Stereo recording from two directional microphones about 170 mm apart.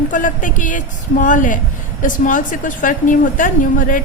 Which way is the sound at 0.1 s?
50° left (ahead or behind).